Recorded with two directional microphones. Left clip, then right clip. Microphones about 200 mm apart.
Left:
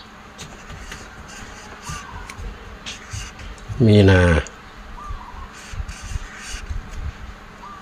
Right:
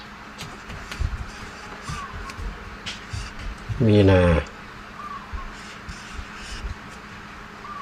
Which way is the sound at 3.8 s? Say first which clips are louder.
Left 2 dB; 40° left (ahead or behind).